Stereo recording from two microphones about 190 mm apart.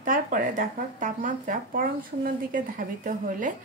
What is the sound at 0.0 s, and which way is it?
A woman's voice, 45° right (ahead or behind).